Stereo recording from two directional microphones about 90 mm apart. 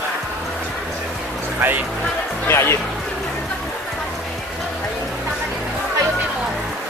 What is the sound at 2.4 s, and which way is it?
Speech, 30° left (ahead or behind).